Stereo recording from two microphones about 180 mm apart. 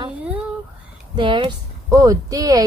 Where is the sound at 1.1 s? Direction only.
25° right (ahead or behind).